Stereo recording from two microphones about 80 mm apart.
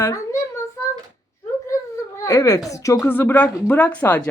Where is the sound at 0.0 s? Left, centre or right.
Left.